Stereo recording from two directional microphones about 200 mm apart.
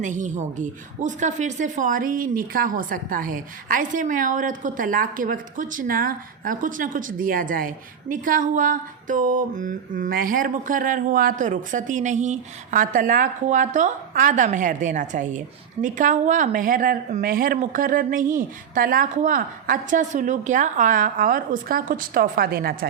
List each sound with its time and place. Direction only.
0.0 s speech: 40° right (ahead or behind)
8.1 s a sound: 45° right (ahead or behind)
15.8 s speech: 40° right (ahead or behind)